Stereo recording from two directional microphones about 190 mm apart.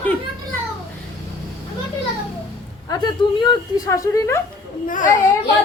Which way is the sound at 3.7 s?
20° left (ahead or behind).